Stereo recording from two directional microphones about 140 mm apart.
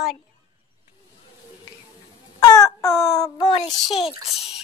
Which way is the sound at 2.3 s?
25° left (ahead or behind).